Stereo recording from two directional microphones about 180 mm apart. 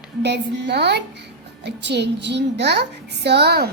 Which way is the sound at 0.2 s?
70° right (ahead or behind).